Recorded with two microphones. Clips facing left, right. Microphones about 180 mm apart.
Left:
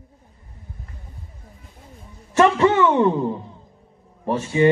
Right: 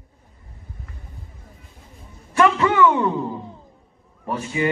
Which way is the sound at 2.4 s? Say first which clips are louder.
Left 1 dB; 30° left (ahead or behind).